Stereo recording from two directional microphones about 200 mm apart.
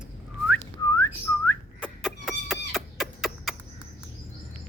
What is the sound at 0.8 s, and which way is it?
Whistling, 15° left (ahead or behind).